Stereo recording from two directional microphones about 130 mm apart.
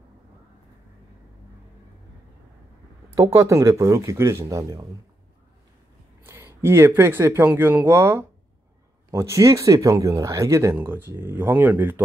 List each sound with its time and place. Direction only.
3.2 s speech: 25° right (ahead or behind)
6.2 s speech: 20° right (ahead or behind)